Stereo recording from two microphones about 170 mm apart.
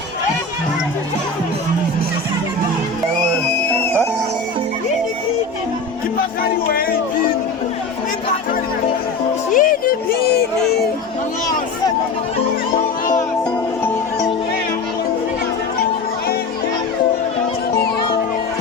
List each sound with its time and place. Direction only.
9.6 s music: 50° left (ahead or behind)
17.7 s music: 70° left (ahead or behind)